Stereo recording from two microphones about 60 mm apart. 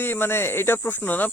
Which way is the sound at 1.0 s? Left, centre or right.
Left.